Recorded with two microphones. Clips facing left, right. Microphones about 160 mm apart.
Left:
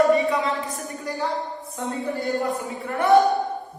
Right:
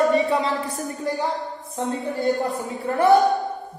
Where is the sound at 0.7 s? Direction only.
25° right (ahead or behind).